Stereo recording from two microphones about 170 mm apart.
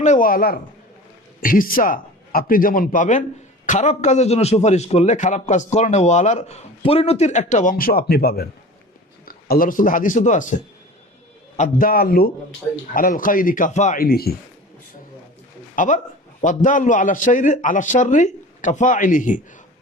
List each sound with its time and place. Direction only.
0.0 s a man's voice: 50° left (ahead or behind)
11.5 s a man's voice: 50° left (ahead or behind)
14.0 s a man's voice: 65° left (ahead or behind)
15.7 s a man's voice: 50° left (ahead or behind)